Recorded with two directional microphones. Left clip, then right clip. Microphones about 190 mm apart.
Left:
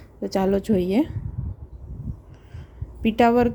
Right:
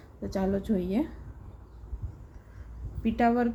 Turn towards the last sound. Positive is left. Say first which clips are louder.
# left 8 dB
turn(degrees=50)  # may be behind; listen again after turning